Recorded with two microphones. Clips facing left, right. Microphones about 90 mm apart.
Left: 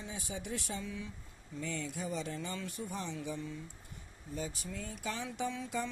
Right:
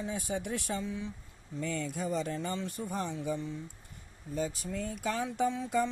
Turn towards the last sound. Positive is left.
turn(degrees=-35)  # may be behind; listen again after turning